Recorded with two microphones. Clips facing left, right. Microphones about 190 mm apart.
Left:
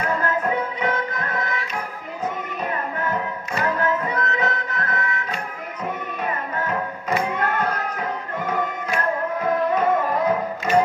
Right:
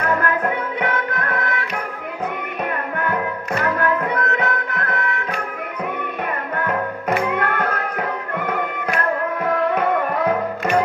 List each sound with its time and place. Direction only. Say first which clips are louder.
0.1 s music: right 2 dB; 60° right (ahead or behind)
3.6 s music: right 2 dB; 65° right (ahead or behind)
6.5 s music: right 3 dB; 60° right (ahead or behind)